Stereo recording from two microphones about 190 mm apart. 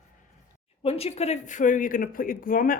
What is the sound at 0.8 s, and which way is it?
A man's voice, 30° left (ahead or behind).